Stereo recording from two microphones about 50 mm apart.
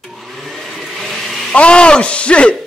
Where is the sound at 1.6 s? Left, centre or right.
Left.